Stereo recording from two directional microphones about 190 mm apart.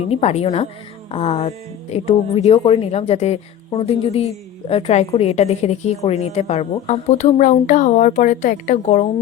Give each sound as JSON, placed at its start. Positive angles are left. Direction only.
{"t": 0.1, "sound": "a woman's voice", "side_deg": 35}